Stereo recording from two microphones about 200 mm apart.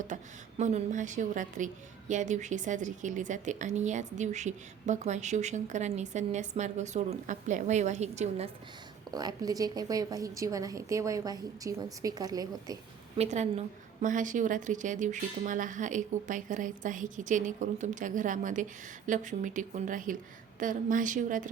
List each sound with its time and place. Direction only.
0.1 s a woman's voice: 35° right (ahead or behind)
9.1 s a woman's voice: 20° right (ahead or behind)
13.1 s a woman's voice: 35° right (ahead or behind)